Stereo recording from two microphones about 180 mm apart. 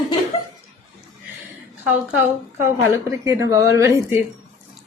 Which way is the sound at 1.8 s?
10° right (ahead or behind).